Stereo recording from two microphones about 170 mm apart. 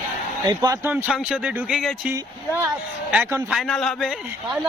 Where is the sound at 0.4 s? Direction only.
25° right (ahead or behind).